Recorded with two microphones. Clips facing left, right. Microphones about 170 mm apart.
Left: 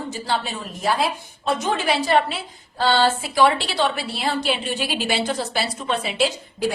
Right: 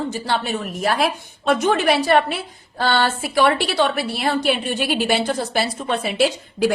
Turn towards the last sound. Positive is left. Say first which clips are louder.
# right 4 dB
turn(degrees=-75)  # may be behind; listen again after turning